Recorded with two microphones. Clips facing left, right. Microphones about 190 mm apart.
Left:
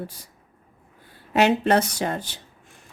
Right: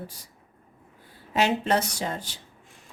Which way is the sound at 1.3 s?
65° left (ahead or behind).